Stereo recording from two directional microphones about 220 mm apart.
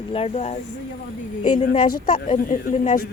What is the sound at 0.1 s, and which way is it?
Speech, 30° left (ahead or behind).